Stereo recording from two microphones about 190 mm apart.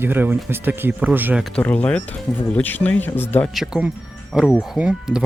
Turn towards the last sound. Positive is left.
turn(degrees=-5)  # may be behind; listen again after turning